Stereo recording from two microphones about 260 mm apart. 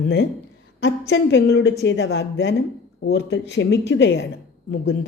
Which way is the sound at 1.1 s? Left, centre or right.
Left.